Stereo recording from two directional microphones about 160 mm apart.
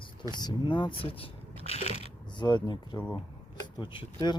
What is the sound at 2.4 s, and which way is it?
Speech, 25° left (ahead or behind).